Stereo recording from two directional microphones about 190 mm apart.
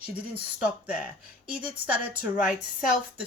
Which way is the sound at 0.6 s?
5° right (ahead or behind).